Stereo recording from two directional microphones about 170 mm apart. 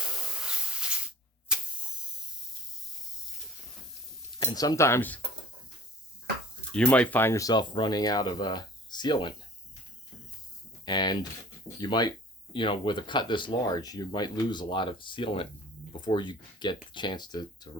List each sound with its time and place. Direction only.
0.0 s spray: 5° right (ahead or behind)
4.4 s speech: 20° left (ahead or behind)
6.7 s speech: 10° left (ahead or behind); by 9.3 s 25° left (ahead or behind)
10.8 s speech: 25° left (ahead or behind)